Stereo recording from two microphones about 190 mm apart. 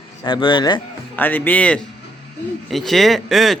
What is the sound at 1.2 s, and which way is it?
A man's voice, 10° left (ahead or behind).